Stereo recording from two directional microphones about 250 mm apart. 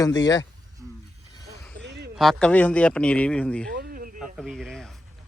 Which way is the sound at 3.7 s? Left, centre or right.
Right.